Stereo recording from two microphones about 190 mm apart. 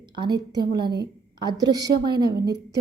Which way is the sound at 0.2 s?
20° right (ahead or behind).